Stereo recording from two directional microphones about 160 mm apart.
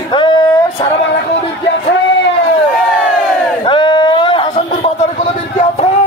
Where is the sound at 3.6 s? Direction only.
30° left (ahead or behind).